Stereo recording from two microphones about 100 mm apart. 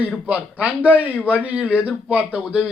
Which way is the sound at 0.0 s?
15° right (ahead or behind).